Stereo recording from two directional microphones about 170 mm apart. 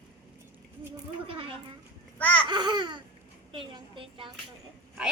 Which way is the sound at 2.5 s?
25° right (ahead or behind).